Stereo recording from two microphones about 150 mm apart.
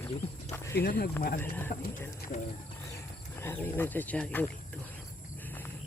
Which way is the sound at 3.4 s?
15° left (ahead or behind).